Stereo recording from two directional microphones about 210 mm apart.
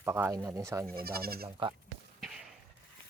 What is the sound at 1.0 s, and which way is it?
Speech, 45° right (ahead or behind).